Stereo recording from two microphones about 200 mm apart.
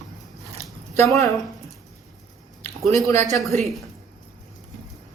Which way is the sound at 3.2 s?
Centre (ahead or behind).